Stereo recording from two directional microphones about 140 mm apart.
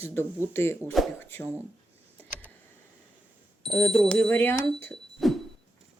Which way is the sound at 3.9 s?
5° left (ahead or behind).